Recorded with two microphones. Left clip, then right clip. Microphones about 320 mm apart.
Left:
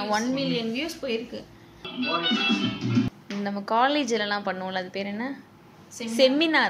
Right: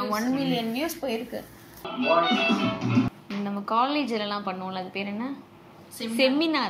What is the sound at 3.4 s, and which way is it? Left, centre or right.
A woman's voice, left.